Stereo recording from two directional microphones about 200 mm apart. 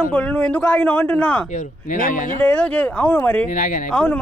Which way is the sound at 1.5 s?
40° left (ahead or behind).